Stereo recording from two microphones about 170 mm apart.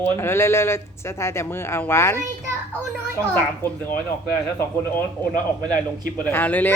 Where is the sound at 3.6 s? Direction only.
15° left (ahead or behind).